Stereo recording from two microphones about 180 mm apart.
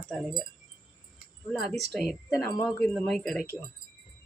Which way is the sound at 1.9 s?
5° left (ahead or behind).